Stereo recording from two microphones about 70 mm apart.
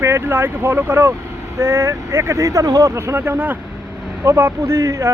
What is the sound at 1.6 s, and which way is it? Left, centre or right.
Speech, right.